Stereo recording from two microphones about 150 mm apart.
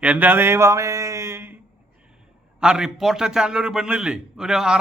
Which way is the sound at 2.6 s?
5° right (ahead or behind).